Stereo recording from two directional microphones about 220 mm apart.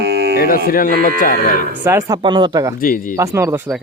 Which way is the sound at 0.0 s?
45° right (ahead or behind).